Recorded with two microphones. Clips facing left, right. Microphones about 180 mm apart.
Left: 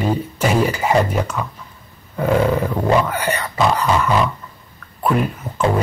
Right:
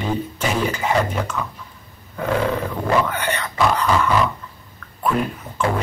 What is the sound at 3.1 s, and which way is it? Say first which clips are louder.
Speech: left 3 dB; 10° left (ahead or behind).